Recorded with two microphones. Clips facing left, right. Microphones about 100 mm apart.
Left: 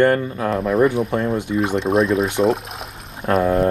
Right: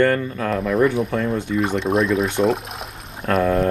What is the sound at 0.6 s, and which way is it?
Speech, centre (ahead or behind).